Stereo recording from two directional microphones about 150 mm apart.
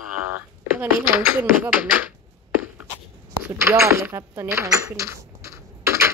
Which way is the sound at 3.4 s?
15° right (ahead or behind).